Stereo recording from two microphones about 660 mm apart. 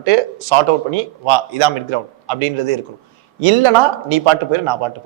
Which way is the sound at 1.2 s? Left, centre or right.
Right.